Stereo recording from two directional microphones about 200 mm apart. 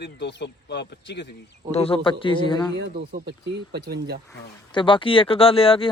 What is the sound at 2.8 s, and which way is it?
Speech, 55° right (ahead or behind).